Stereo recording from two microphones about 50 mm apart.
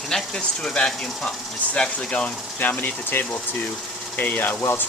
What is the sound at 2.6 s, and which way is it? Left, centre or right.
Speech, left.